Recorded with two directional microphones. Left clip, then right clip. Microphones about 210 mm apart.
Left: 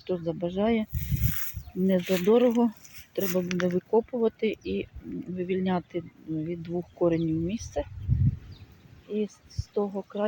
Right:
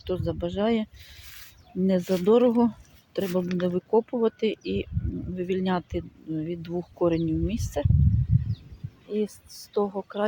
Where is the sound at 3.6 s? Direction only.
10° right (ahead or behind).